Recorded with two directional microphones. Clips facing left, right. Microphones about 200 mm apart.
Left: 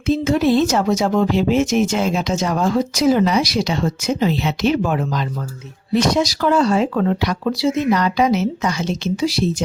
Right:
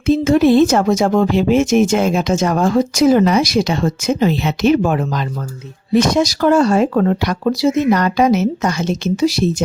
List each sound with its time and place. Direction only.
0.0 s speech: 50° right (ahead or behind)